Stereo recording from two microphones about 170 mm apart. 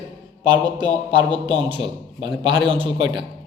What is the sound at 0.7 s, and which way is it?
A man's voice, 30° right (ahead or behind).